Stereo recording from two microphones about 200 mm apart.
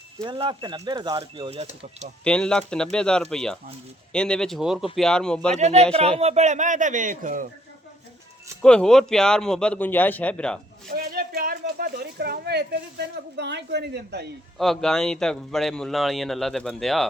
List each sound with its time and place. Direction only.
0.3 s speech: 25° right (ahead or behind)
2.2 s speech: 5° left (ahead or behind)
5.5 s speech: 35° right (ahead or behind)
8.6 s speech: 5° left (ahead or behind)
10.9 s speech: 50° right (ahead or behind)
14.6 s speech: centre (ahead or behind)